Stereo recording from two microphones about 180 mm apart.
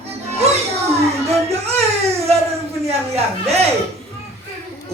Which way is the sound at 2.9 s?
35° right (ahead or behind).